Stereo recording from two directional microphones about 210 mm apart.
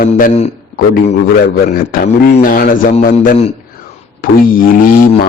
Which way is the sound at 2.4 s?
40° left (ahead or behind).